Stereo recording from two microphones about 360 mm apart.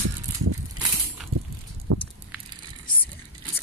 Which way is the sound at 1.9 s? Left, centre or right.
Right.